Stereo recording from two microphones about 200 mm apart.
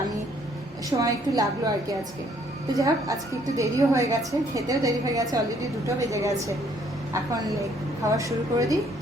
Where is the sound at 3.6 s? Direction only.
15° right (ahead or behind).